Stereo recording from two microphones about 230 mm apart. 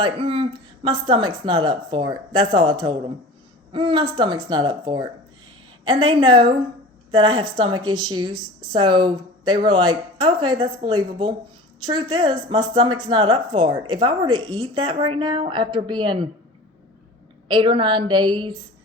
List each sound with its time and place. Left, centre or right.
0.0 s a woman's voice: right
17.5 s a woman's voice: right